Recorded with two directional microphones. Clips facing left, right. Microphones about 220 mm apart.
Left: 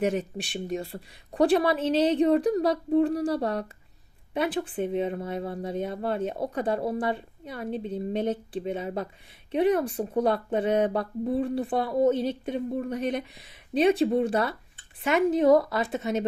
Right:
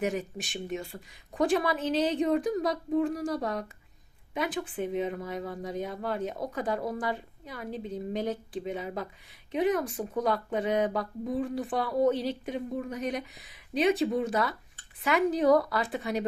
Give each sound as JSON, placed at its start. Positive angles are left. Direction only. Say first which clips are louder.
{"t": 0.0, "sound": "a woman's voice", "louder": "left 4 dB", "side_deg": 30}